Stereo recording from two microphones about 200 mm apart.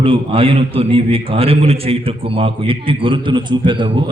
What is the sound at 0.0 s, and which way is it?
A man's voice, 25° right (ahead or behind).